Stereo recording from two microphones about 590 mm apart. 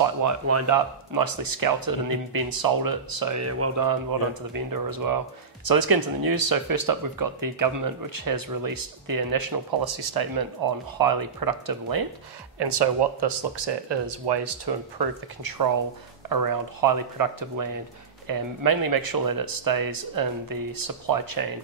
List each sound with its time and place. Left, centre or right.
0.0 s speech: right
3.4 s speech: right
3.9 s speech: right
16.3 s speech: right